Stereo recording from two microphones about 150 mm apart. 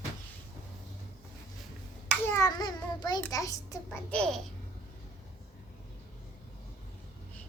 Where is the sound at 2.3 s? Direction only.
25° left (ahead or behind).